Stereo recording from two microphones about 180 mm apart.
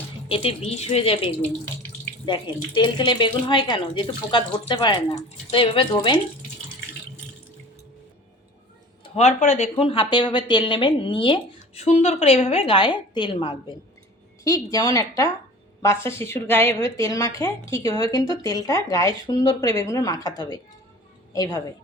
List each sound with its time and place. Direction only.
0.3 s speech: 30° left (ahead or behind)
9.0 s a woman's voice: 40° left (ahead or behind); by 21.6 s 20° left (ahead or behind)